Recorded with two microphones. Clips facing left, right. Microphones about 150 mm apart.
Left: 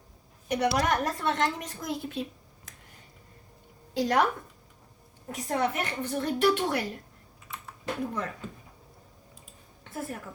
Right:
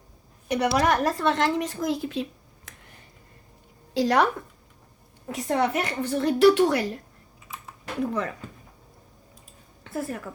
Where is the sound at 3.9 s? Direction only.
90° right.